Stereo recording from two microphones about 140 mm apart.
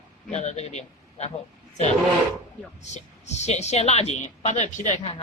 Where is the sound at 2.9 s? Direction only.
55° left (ahead or behind).